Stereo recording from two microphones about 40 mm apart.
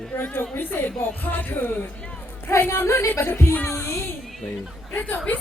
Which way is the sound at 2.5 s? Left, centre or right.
Left.